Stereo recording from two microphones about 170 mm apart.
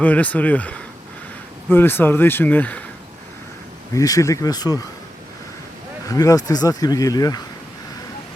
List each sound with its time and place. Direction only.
0.0 s speech: 10° left (ahead or behind)
3.9 s speech: 20° left (ahead or behind)
6.1 s speech: 20° left (ahead or behind)